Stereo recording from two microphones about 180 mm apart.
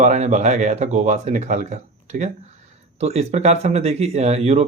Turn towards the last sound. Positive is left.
turn(degrees=-35)  # may be behind; listen again after turning